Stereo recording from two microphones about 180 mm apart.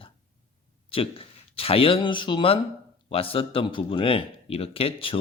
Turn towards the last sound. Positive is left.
turn(degrees=30)  # may be behind; listen again after turning